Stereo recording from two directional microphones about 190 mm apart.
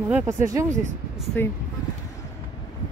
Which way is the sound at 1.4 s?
10° left (ahead or behind).